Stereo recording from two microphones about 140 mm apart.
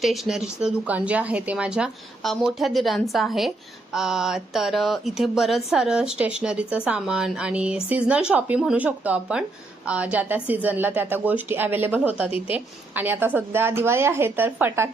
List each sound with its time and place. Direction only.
0.0 s a woman's voice: centre (ahead or behind)